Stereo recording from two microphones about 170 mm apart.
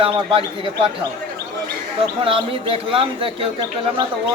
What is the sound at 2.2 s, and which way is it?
Speech, 30° right (ahead or behind).